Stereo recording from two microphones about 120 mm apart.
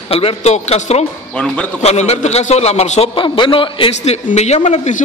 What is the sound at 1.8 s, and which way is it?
A man's voice, 65° left (ahead or behind).